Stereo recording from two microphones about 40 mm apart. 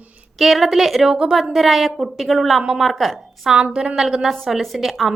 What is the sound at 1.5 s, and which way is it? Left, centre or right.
A woman's voice, centre.